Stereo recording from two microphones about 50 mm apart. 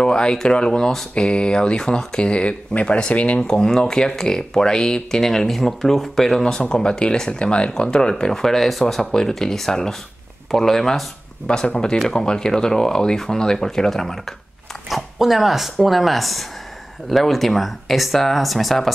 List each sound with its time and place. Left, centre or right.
0.0 s speech: centre
3.4 s speech: centre
11.4 s speech: centre